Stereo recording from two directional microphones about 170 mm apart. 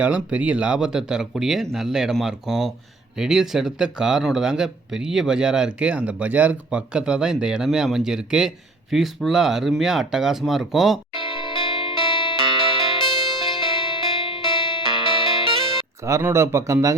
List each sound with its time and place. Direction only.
0.0 s speech: 10° right (ahead or behind)
11.1 s music: 30° left (ahead or behind)
12.4 s music: 30° right (ahead or behind)
13.0 s music: 25° left (ahead or behind)
16.0 s speech: 15° right (ahead or behind)